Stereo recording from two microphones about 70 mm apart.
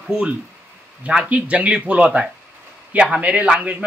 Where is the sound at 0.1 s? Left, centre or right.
Centre.